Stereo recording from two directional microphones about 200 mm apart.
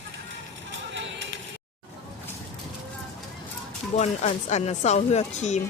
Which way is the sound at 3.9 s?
35° left (ahead or behind).